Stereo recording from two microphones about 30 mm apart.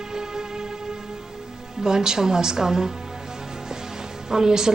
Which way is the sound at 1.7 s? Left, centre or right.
Right.